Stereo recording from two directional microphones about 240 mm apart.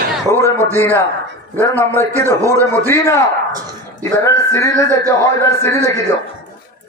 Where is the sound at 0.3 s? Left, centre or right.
Centre.